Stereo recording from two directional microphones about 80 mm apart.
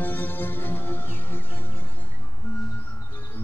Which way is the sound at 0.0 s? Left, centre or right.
Left.